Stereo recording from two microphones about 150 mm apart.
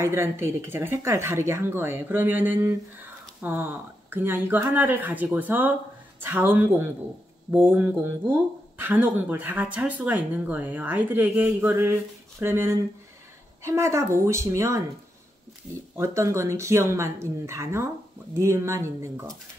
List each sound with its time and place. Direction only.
0.0 s speech: 15° right (ahead or behind)
16.0 s speech: 20° right (ahead or behind)